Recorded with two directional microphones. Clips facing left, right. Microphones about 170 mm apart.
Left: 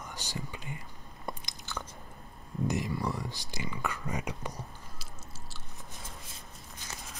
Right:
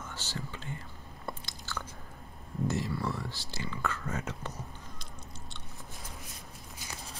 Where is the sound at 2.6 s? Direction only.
15° left (ahead or behind).